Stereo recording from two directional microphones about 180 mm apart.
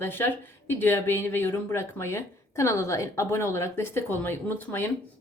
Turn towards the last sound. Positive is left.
turn(degrees=10)  # may be behind; listen again after turning